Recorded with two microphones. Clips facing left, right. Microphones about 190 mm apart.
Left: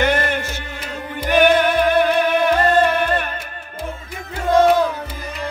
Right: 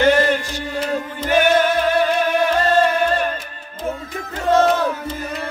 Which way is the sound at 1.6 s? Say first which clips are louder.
Left 1 dB; 60° left (ahead or behind).